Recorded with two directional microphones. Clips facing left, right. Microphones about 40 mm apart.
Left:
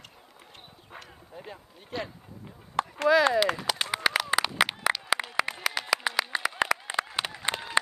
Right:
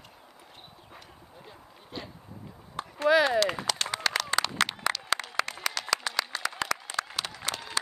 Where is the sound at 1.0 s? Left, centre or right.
Left.